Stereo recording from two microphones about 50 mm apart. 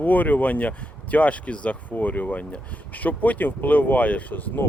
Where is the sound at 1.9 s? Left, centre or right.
Left.